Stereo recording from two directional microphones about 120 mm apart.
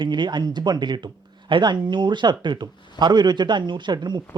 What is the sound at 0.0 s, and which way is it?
Speech, 40° right (ahead or behind).